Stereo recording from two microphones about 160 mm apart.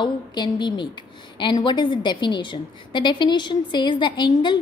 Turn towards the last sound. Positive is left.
turn(degrees=30)  # may be behind; listen again after turning